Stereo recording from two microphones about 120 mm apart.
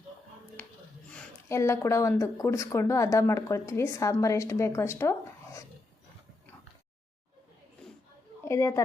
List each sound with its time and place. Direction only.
1.5 s speech: 25° left (ahead or behind)
8.4 s speech: 25° left (ahead or behind)